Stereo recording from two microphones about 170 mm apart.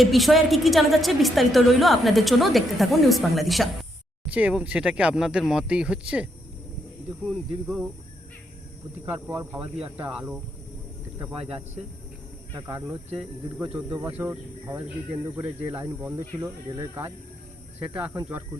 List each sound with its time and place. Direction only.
0.0 s a woman's voice: centre (ahead or behind)
7.3 s a woman's voice: centre (ahead or behind)
9.3 s speech: 20° right (ahead or behind)
9.6 s speech: 35° right (ahead or behind)
10.0 s speech: 5° right (ahead or behind)
12.5 s speech: 15° right (ahead or behind)